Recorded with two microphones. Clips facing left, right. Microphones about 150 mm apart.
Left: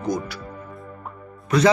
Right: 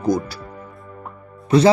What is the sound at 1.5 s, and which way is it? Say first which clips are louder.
Speech: right 4 dB; 30° right (ahead or behind).